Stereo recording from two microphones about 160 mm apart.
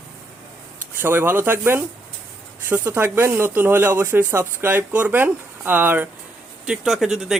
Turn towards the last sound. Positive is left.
turn(degrees=0)  # may be behind; listen again after turning